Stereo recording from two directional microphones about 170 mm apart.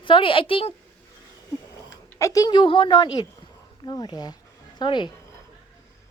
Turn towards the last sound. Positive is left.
turn(degrees=25)  # may be behind; listen again after turning